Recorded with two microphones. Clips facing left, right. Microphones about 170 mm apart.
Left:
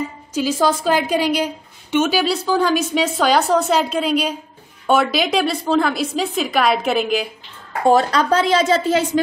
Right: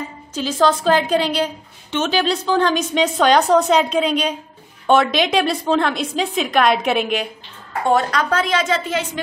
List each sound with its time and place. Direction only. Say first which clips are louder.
0.3 s a woman's voice: right 1 dB; 10° left (ahead or behind)
7.8 s speech: left 3 dB; 35° left (ahead or behind)